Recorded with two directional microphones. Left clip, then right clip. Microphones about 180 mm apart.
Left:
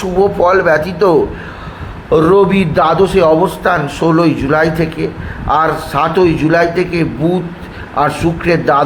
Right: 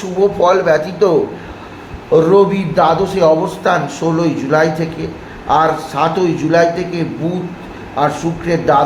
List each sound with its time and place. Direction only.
0.4 s a man's voice: 20° left (ahead or behind)
2.1 s a man's voice: 30° left (ahead or behind)